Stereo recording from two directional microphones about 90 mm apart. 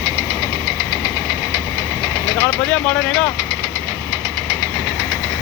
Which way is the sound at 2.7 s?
10° left (ahead or behind).